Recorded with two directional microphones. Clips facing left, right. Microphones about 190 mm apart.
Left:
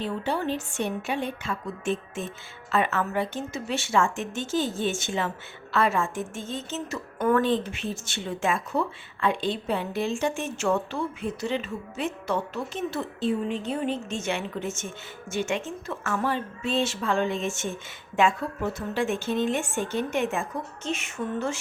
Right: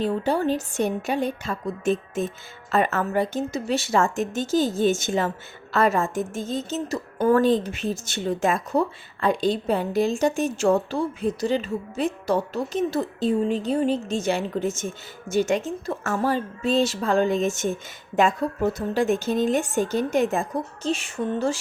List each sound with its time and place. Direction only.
0.0 s a woman's voice: 40° right (ahead or behind)